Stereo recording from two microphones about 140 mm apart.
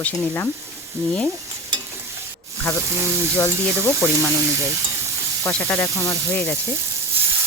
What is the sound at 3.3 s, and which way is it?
Speech, 15° left (ahead or behind).